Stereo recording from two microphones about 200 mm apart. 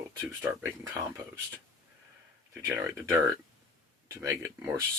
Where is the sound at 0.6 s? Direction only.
15° right (ahead or behind).